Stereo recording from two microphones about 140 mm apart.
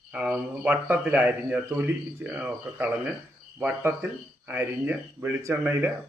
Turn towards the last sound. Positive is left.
turn(degrees=-15)  # may be behind; listen again after turning